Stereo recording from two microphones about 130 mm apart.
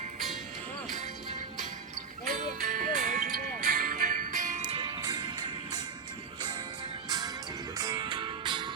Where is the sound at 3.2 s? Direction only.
90° right.